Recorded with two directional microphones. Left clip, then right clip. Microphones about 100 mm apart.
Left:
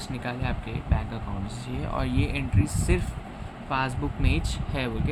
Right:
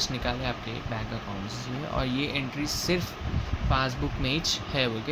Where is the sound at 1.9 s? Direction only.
10° left (ahead or behind).